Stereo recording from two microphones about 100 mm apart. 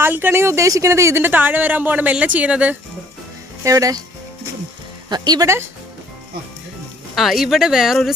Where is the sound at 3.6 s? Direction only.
35° right (ahead or behind).